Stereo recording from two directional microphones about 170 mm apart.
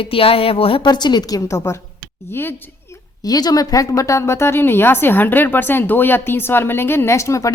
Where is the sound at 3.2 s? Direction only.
20° left (ahead or behind).